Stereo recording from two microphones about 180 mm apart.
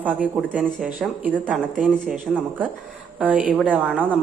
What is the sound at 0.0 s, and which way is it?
Speech, 10° right (ahead or behind).